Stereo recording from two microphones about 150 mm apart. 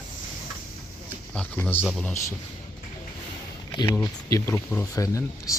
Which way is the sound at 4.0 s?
20° left (ahead or behind).